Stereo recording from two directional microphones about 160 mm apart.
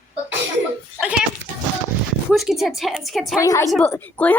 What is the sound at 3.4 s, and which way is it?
Speech, 20° left (ahead or behind).